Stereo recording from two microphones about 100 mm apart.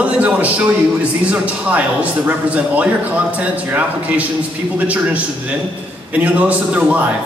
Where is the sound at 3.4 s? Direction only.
15° right (ahead or behind).